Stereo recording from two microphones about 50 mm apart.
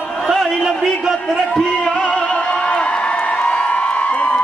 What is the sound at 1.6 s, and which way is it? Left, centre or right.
Music, left.